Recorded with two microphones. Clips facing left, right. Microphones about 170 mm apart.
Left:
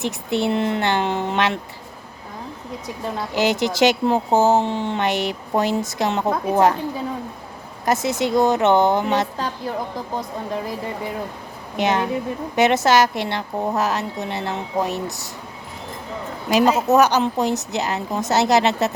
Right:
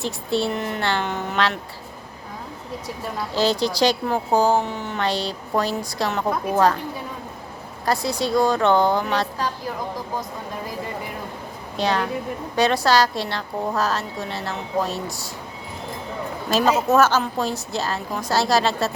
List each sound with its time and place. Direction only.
0.0 s a woman's voice: 20° left (ahead or behind)
3.3 s a woman's voice: 20° left (ahead or behind)
7.9 s a woman's voice: 20° left (ahead or behind)
11.8 s a woman's voice: 20° left (ahead or behind)
16.5 s a woman's voice: 15° left (ahead or behind)